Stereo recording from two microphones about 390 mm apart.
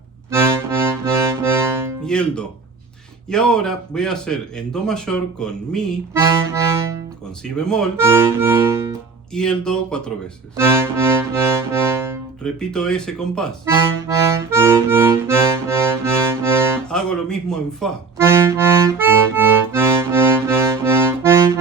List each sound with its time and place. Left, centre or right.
0.3 s music: centre
2.0 s a man's voice: centre
10.6 s music: centre